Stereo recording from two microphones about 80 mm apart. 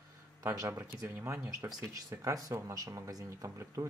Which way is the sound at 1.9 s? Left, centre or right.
Right.